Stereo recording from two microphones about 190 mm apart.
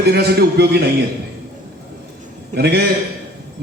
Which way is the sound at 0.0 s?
60° right (ahead or behind).